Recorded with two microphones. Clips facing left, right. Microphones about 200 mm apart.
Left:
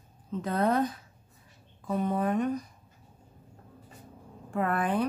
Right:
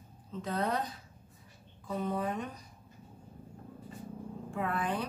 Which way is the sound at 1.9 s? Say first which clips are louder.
Left 6 dB; 55° left (ahead or behind).